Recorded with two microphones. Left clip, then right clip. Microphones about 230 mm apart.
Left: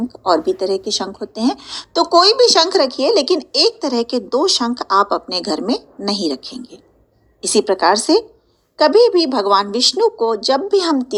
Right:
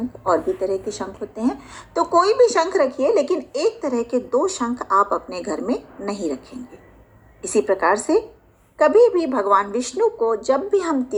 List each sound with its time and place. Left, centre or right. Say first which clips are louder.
0.3 s a woman's voice: left 4 dB; left